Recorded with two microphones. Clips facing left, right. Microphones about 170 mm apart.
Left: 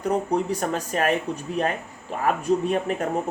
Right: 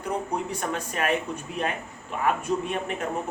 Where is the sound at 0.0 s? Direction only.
40° left (ahead or behind).